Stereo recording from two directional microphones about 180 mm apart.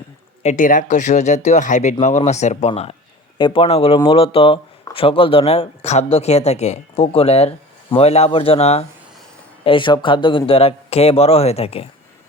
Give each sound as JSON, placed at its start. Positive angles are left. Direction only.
{"t": 0.4, "sound": "speech", "side_deg": 45}